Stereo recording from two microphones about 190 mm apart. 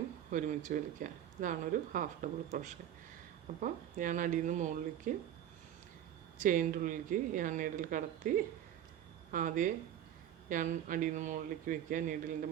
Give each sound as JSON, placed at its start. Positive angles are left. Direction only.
{"t": 0.3, "sound": "speech", "side_deg": -40}
{"t": 6.4, "sound": "speech", "side_deg": -45}
{"t": 9.3, "sound": "speech", "side_deg": -45}